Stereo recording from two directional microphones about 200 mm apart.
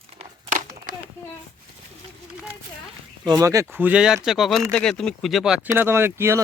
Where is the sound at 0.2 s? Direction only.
40° right (ahead or behind).